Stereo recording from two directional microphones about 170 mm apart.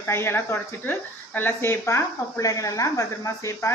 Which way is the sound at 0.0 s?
15° left (ahead or behind).